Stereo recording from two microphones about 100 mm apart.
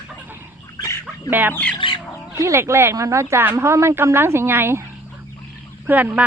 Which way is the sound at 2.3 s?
30° right (ahead or behind).